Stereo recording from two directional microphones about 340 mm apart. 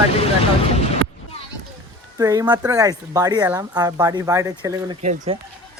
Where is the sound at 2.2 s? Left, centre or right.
Centre.